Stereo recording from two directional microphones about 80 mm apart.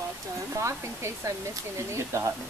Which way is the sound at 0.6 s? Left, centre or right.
Right.